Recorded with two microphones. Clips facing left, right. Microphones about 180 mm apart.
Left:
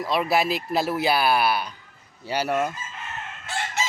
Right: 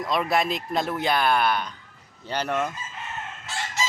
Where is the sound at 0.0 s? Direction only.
5° left (ahead or behind).